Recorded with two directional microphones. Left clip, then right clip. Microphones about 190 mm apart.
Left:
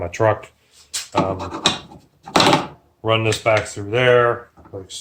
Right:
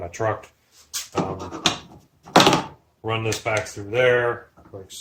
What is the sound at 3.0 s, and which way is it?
Speech, 45° left (ahead or behind).